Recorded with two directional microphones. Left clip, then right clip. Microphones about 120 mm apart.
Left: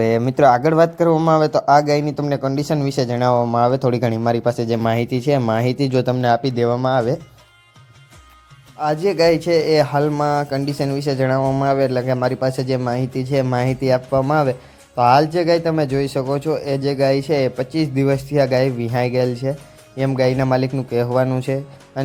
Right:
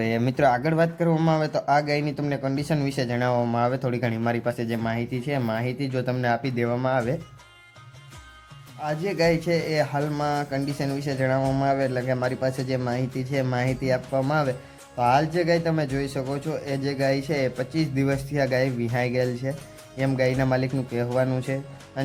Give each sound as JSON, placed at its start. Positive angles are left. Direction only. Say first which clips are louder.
{"t": 0.3, "sound": "a man's voice", "louder": "left 7 dB", "side_deg": 30}
{"t": 4.9, "sound": "speech", "louder": "left 10 dB", "side_deg": 85}
{"t": 5.5, "sound": "speech", "louder": "left 9 dB", "side_deg": 85}
{"t": 6.2, "sound": "a man's voice", "louder": "left 7 dB", "side_deg": 45}
{"t": 8.8, "sound": "a man's voice", "louder": "left 8 dB", "side_deg": 50}
{"t": 10.1, "sound": "speech", "louder": "left 7 dB", "side_deg": 30}